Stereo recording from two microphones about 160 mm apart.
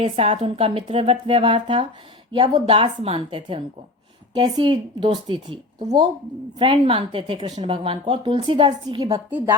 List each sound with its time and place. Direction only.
0.0 s a woman's voice: 35° right (ahead or behind)